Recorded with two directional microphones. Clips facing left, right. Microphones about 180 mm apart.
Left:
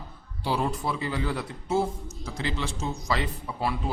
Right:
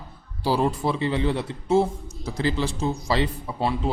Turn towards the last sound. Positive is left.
turn(degrees=-30)  # may be behind; listen again after turning